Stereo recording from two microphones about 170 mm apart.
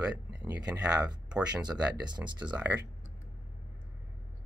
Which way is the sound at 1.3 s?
5° right (ahead or behind).